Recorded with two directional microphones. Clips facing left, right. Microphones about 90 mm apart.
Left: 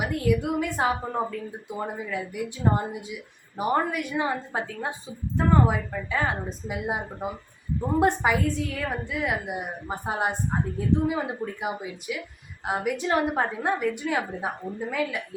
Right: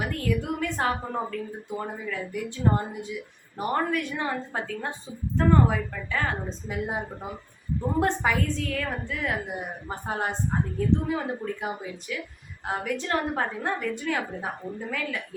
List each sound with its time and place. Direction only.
0.0 s a woman's voice: 15° left (ahead or behind)